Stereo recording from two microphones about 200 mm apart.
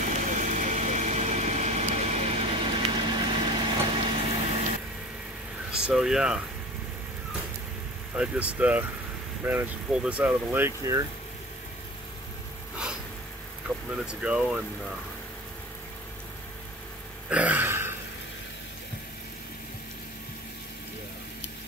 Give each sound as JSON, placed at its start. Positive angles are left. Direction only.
{"t": 0.0, "sound": "vehicle", "side_deg": -40}
{"t": 5.7, "sound": "speech", "side_deg": -5}
{"t": 8.2, "sound": "speech", "side_deg": -5}
{"t": 13.7, "sound": "vehicle", "side_deg": 10}
{"t": 14.0, "sound": "speech", "side_deg": -5}
{"t": 17.3, "sound": "a sound", "side_deg": -5}